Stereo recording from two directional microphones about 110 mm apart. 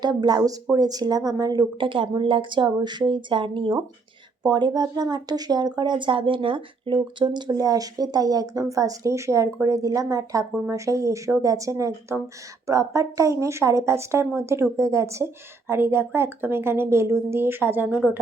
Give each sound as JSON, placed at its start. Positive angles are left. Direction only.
{"t": 0.0, "sound": "speech", "side_deg": -40}
{"t": 1.8, "sound": "speech", "side_deg": -50}
{"t": 4.4, "sound": "a woman's voice", "side_deg": -40}
{"t": 17.8, "sound": "speech", "side_deg": -10}